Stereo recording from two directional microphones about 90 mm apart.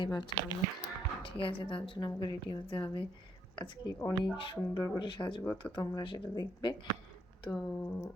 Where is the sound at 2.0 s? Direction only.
55° left (ahead or behind).